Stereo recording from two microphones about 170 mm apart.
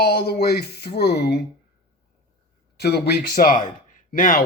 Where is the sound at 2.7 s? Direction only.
70° left (ahead or behind); by 4.4 s 55° left (ahead or behind).